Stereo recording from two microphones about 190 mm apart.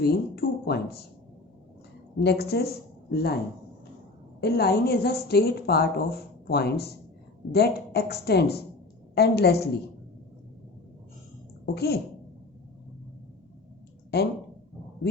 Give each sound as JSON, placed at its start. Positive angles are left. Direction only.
{"t": 0.0, "sound": "a woman's voice", "side_deg": 55}
{"t": 2.1, "sound": "a woman's voice", "side_deg": 60}
{"t": 4.4, "sound": "a woman's voice", "side_deg": 60}
{"t": 11.6, "sound": "a woman's voice", "side_deg": 55}